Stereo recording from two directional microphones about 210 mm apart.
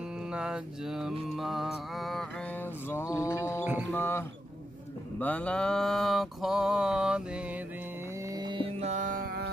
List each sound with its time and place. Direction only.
0.3 s mantra: 5° right (ahead or behind)
2.9 s mantra: 10° left (ahead or behind)
5.2 s mantra: 5° left (ahead or behind)
8.4 s music: 25° right (ahead or behind); by 9.5 s 45° right (ahead or behind)